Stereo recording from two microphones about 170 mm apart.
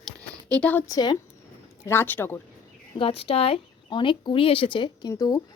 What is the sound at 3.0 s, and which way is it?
Speech, 35° left (ahead or behind).